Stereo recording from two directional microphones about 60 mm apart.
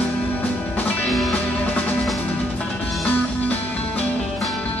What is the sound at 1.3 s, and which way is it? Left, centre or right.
Music, left.